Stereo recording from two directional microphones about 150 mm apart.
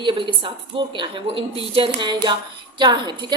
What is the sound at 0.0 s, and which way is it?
A woman's voice, 35° right (ahead or behind).